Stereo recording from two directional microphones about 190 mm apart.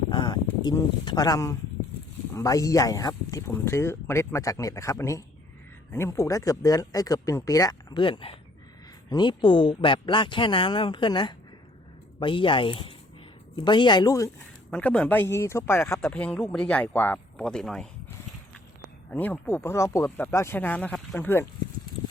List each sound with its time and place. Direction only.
0.1 s speech: 25° left (ahead or behind)
14.7 s speech: 5° left (ahead or behind)
19.1 s speech: 10° left (ahead or behind)